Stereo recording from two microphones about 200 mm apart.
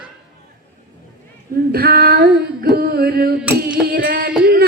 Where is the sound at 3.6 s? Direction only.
45° right (ahead or behind).